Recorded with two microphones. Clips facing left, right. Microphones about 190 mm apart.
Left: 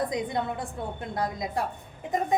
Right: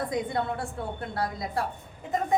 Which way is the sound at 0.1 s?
15° left (ahead or behind).